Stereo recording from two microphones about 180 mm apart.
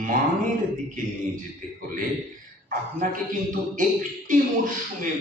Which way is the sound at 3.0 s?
50° right (ahead or behind).